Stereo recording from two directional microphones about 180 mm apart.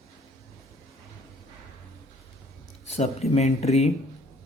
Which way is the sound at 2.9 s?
35° left (ahead or behind).